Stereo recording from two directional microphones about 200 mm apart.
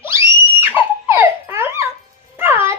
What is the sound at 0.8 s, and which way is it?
Baby laughter, 10° right (ahead or behind).